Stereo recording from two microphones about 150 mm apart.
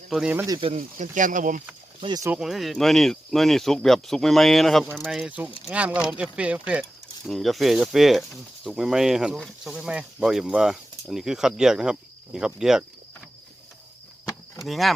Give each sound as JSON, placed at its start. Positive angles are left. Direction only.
{"t": 0.1, "sound": "speech", "side_deg": -5}
{"t": 0.7, "sound": "speech", "side_deg": -60}
{"t": 2.0, "sound": "speech", "side_deg": -30}
{"t": 2.4, "sound": "speech", "side_deg": 0}
{"t": 14.6, "sound": "speech", "side_deg": 0}